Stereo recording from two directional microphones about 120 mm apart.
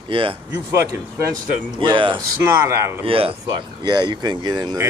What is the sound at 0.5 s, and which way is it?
Speech, 25° right (ahead or behind).